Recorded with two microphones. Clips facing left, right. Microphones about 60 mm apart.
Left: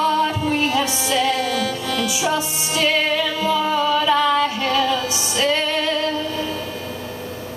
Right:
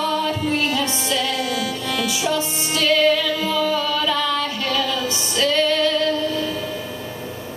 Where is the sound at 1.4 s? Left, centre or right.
Centre.